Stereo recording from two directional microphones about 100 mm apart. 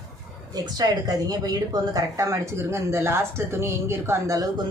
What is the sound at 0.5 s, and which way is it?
Speech, 40° right (ahead or behind).